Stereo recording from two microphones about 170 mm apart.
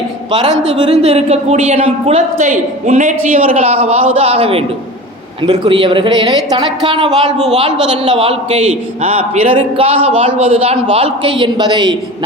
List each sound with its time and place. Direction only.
0.3 s a woman's voice: 30° right (ahead or behind)